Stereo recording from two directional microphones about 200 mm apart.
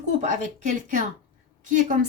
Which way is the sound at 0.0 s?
35° right (ahead or behind).